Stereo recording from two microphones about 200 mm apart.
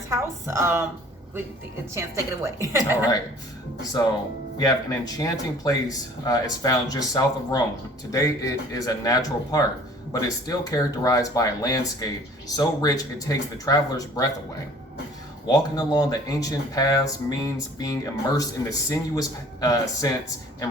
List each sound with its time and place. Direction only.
0.1 s a woman's voice: 15° right (ahead or behind)
2.0 s a woman's voice: 15° right (ahead or behind)
4.6 s speech: 20° left (ahead or behind)
15.4 s speech: 20° left (ahead or behind)